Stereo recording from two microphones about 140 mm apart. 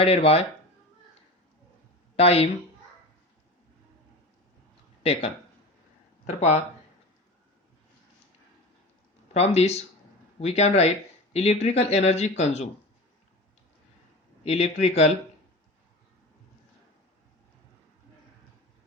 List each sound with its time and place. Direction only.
0.0 s speech: 45° left (ahead or behind)
2.1 s speech: 45° left (ahead or behind)
6.2 s speech: 50° left (ahead or behind)
9.3 s speech: 50° left (ahead or behind)
14.4 s speech: 50° left (ahead or behind)